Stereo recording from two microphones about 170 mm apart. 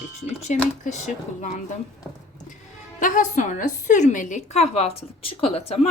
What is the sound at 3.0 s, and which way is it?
A woman's voice, 50° left (ahead or behind).